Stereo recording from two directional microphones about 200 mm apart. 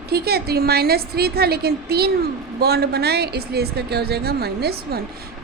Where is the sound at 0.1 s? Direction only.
50° right (ahead or behind).